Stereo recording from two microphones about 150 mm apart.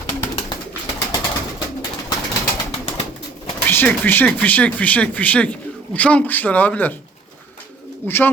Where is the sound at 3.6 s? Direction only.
10° left (ahead or behind).